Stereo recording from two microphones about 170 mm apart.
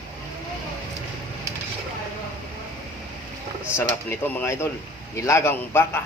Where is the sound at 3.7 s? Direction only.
10° left (ahead or behind).